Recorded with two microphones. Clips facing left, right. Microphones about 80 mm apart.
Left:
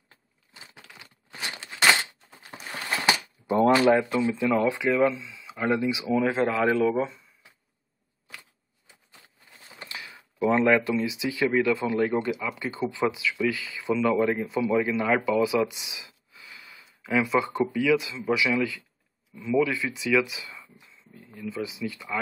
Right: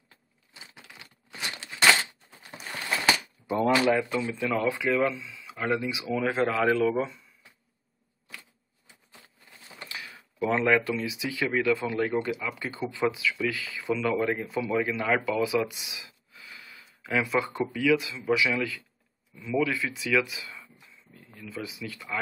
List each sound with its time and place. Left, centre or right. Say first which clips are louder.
0.5 s crumpling: left 1 dB; centre
1.8 s a sound: even; centre
4.0 s speech: left 4 dB; centre
7.0 s speech: left 2 dB; centre
9.6 s a sound: even; centre
11.4 s speech: left 3 dB; centre